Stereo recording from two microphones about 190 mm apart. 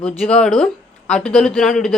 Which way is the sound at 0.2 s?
5° left (ahead or behind).